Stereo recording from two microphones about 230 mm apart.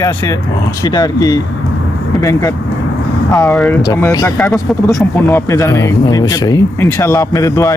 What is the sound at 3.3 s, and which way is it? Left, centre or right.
Speech, centre.